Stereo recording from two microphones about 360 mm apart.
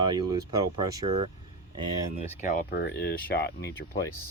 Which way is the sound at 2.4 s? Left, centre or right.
Left.